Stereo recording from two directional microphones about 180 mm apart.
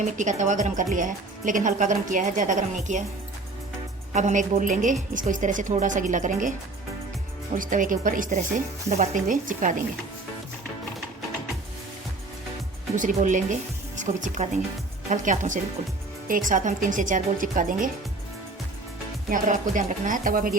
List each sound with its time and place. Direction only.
0.2 s speech: 45° right (ahead or behind)
4.1 s speech: 40° right (ahead or behind)
7.5 s speech: 45° right (ahead or behind)
13.0 s speech: 45° right (ahead or behind)
19.3 s speech: 45° right (ahead or behind)